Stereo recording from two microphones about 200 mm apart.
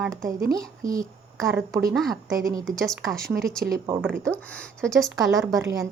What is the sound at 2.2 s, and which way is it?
Speech, 15° right (ahead or behind).